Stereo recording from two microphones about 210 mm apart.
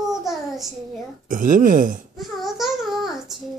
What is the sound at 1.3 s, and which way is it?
Speech, 40° right (ahead or behind).